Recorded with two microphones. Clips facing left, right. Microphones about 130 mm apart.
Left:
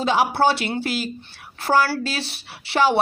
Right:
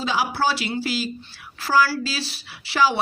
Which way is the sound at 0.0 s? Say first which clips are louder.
Left 4 dB; 55° left (ahead or behind).